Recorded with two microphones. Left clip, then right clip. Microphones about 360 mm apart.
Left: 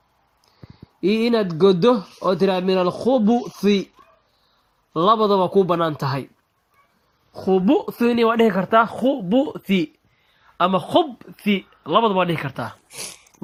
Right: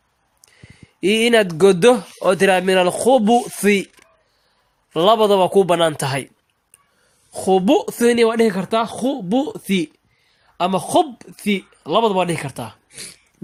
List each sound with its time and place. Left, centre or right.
1.0 s speech: centre
4.9 s speech: centre
7.3 s speech: centre